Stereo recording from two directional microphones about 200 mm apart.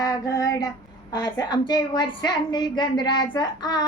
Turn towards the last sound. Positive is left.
turn(degrees=20)  # may be behind; listen again after turning